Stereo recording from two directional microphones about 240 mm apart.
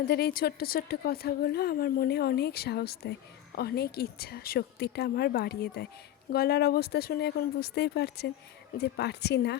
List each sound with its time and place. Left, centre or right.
0.1 s a woman's voice: left